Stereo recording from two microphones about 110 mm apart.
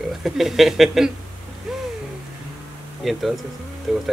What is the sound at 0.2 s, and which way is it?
Speech, centre (ahead or behind).